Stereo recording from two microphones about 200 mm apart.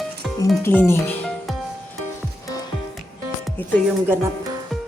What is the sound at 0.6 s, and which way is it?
Speech, 10° left (ahead or behind).